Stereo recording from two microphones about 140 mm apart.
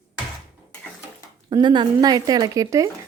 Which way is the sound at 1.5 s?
30° right (ahead or behind).